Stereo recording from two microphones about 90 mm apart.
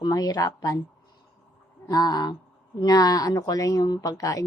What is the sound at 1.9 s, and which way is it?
Speech, 45° left (ahead or behind).